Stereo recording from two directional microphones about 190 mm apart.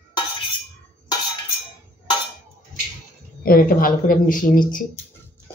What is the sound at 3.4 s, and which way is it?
A man's voice, 50° left (ahead or behind).